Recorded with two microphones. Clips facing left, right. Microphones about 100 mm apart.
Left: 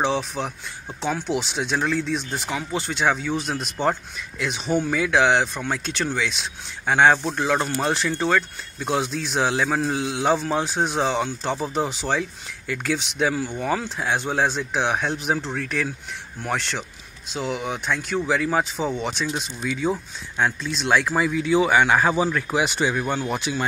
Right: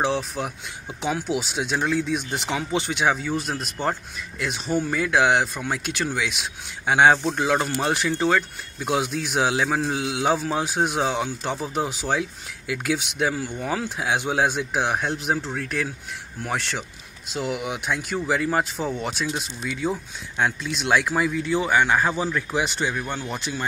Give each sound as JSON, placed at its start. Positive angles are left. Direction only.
{"t": 1.0, "sound": "speech", "side_deg": -5}
{"t": 2.1, "sound": "a man's voice", "side_deg": -20}
{"t": 21.5, "sound": "speech", "side_deg": 15}
{"t": 23.2, "sound": "speech", "side_deg": 10}